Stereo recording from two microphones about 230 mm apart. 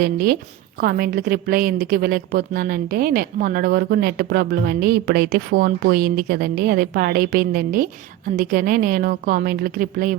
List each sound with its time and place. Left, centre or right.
0.0 s a woman's voice: right